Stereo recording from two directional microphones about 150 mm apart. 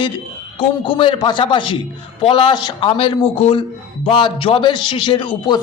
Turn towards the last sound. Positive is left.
turn(degrees=30)  # may be behind; listen again after turning